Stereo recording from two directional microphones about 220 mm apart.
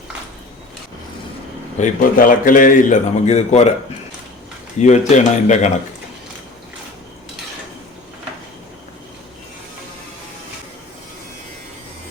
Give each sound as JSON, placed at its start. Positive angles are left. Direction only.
{"t": 1.8, "sound": "a man's voice", "side_deg": 40}
{"t": 4.8, "sound": "a man's voice", "side_deg": 35}